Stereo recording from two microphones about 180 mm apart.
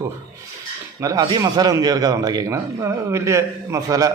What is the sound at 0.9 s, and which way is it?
A man's voice, 20° right (ahead or behind).